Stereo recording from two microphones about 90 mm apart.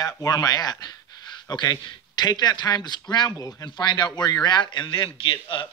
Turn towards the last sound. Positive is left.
turn(degrees=70)  # may be behind; listen again after turning